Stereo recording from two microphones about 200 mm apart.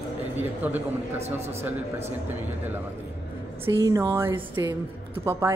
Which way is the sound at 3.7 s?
20° right (ahead or behind).